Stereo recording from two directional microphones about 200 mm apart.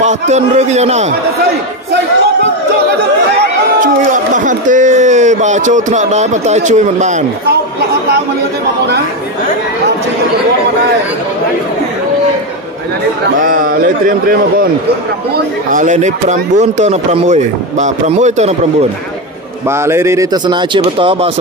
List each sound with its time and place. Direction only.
0.0 s speech: 35° right (ahead or behind)
4.5 s speech: 40° right (ahead or behind)
13.5 s a man's voice: 45° right (ahead or behind)
19.7 s speech: 15° right (ahead or behind)